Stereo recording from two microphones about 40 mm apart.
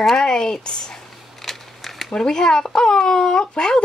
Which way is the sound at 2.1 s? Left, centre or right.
Centre.